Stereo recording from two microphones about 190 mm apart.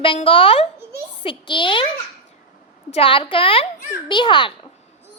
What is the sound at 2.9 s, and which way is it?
A woman's voice, 30° left (ahead or behind).